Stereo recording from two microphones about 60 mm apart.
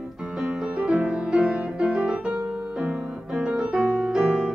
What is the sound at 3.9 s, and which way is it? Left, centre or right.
Music, centre.